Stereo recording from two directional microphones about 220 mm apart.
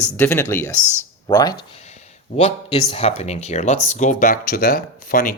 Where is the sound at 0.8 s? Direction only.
10° right (ahead or behind).